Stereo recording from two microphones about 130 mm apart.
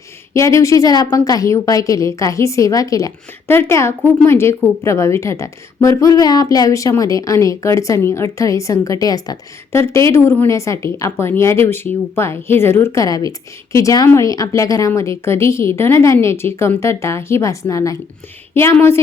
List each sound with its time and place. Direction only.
0.3 s a woman's voice: 25° left (ahead or behind)
10.1 s a woman's voice: 20° left (ahead or behind)